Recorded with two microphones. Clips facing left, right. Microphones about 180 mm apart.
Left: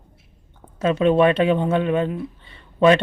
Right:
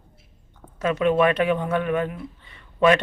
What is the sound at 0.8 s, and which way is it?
Speech, 30° left (ahead or behind).